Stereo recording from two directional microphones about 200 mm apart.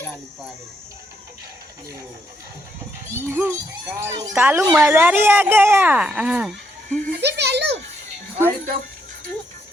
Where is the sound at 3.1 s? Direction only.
10° right (ahead or behind).